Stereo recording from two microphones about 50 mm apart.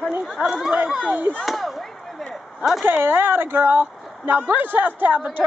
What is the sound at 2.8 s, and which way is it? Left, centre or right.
Speech, right.